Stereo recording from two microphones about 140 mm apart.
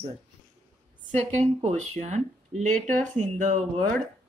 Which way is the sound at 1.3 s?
55° right (ahead or behind).